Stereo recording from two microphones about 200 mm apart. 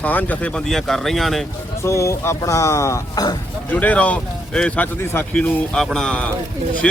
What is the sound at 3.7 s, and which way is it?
A man's voice, 10° left (ahead or behind).